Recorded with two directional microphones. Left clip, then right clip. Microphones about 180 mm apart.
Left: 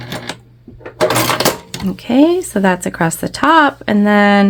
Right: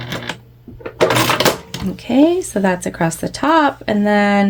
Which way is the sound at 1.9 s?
30° left (ahead or behind).